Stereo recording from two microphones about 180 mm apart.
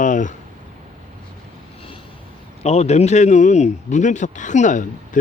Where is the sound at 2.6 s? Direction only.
35° left (ahead or behind).